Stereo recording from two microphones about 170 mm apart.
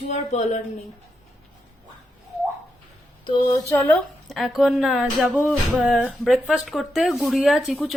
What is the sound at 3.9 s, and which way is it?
Speech, centre (ahead or behind).